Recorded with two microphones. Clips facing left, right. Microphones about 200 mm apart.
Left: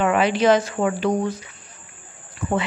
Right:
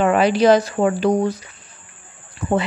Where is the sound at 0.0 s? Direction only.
40° right (ahead or behind).